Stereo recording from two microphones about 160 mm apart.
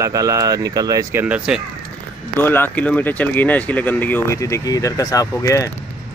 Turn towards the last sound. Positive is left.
turn(degrees=20)  # may be behind; listen again after turning